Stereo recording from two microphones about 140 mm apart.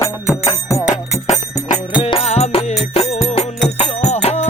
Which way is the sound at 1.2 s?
55° left (ahead or behind).